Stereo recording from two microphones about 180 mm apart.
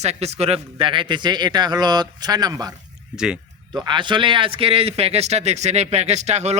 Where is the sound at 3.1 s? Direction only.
5° right (ahead or behind).